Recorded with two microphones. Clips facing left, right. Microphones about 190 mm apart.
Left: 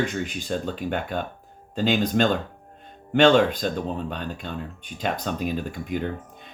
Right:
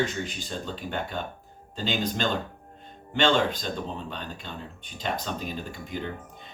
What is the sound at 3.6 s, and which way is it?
Speech, 55° left (ahead or behind).